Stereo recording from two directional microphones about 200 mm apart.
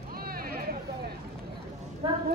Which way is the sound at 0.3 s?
50° right (ahead or behind).